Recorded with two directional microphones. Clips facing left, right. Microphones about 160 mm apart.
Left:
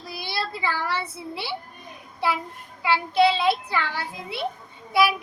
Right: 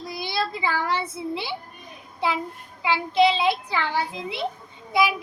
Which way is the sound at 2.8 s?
20° right (ahead or behind).